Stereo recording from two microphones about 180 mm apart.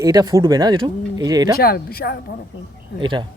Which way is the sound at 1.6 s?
60° left (ahead or behind).